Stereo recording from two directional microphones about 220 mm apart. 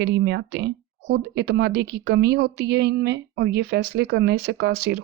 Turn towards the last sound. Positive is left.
turn(degrees=-50)  # may be behind; listen again after turning